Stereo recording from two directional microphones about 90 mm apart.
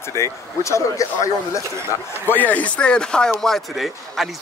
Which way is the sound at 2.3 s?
20° left (ahead or behind).